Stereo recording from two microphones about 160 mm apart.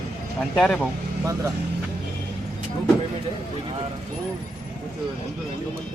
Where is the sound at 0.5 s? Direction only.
5° left (ahead or behind).